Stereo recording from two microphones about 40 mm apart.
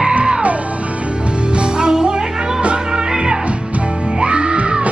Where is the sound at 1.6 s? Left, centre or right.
Right.